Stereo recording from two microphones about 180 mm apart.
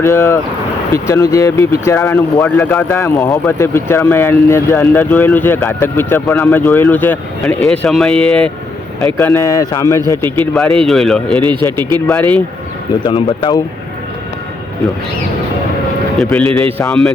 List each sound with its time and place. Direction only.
0.0 s speech: 15° left (ahead or behind)
9.1 s speech: 15° left (ahead or behind)
10.5 s speech: centre (ahead or behind)
11.6 s speech: 15° left (ahead or behind)
12.0 s speech: 5° left (ahead or behind)
13.1 s speech: 25° left (ahead or behind)
16.1 s speech: 5° left (ahead or behind)